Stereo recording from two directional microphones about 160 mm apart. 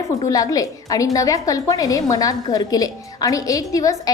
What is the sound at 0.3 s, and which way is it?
A woman's voice, 20° left (ahead or behind).